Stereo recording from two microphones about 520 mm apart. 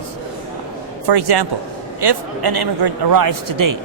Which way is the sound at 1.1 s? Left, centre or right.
Right.